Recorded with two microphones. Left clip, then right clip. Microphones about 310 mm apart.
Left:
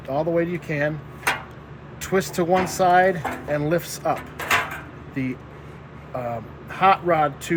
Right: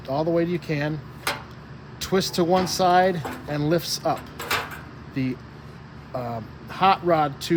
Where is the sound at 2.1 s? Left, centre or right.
Right.